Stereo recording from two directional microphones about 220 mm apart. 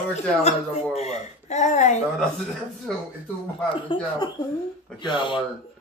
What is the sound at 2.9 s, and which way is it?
Speech, centre (ahead or behind).